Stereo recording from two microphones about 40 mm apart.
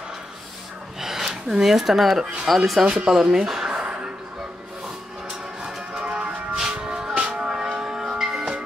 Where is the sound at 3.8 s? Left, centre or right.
Right.